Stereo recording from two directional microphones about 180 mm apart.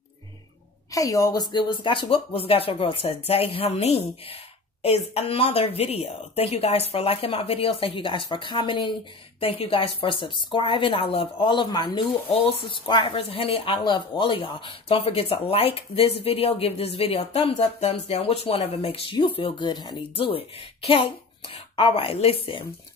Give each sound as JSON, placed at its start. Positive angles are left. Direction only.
{"t": 0.9, "sound": "a woman's voice", "side_deg": 20}